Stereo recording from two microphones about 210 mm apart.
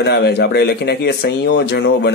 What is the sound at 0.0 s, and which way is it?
Speech, 55° left (ahead or behind).